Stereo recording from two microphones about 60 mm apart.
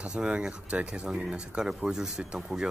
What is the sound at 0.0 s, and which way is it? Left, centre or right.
Speech, centre.